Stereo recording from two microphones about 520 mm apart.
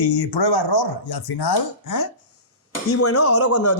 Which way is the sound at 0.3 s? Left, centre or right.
Left.